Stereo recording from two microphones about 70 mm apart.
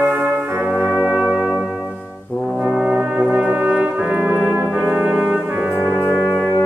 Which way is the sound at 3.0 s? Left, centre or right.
Right.